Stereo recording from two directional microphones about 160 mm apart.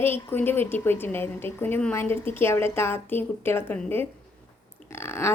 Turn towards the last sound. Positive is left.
turn(degrees=15)  # may be behind; listen again after turning